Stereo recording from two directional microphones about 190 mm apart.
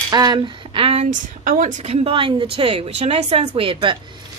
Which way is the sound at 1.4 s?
45° right (ahead or behind).